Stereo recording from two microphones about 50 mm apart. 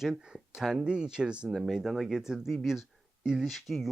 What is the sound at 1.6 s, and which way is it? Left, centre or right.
Speech, centre.